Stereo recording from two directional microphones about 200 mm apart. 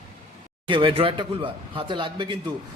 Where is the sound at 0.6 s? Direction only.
25° right (ahead or behind).